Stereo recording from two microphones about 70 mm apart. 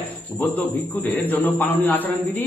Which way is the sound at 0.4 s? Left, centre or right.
Left.